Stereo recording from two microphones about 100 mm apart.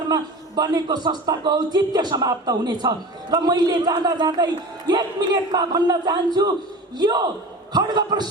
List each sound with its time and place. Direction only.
0.1 s speech: 40° right (ahead or behind)